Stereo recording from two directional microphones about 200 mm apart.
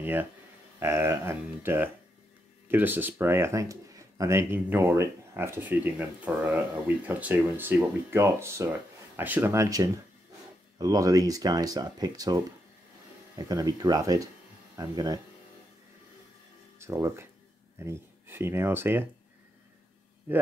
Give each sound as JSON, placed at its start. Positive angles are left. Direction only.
{"t": 0.0, "sound": "speech", "side_deg": -10}
{"t": 16.7, "sound": "speech", "side_deg": -15}